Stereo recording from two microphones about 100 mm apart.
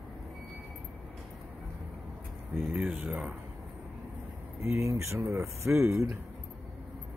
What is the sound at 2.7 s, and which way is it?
Speech, 15° right (ahead or behind).